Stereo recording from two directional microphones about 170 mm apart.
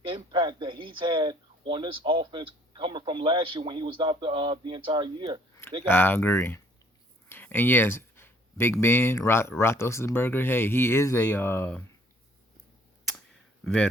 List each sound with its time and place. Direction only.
0.0 s speech: 30° right (ahead or behind)
5.8 s speech: 10° left (ahead or behind)